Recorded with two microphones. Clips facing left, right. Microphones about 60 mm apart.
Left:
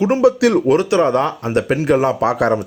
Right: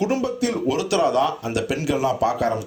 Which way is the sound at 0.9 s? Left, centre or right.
Left.